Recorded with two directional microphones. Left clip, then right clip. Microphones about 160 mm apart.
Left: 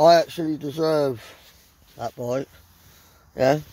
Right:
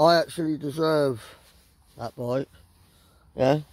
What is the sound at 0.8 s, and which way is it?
Speech, 10° right (ahead or behind).